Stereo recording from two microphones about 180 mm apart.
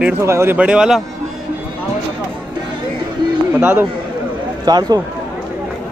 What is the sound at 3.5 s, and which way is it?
Speech, 10° right (ahead or behind).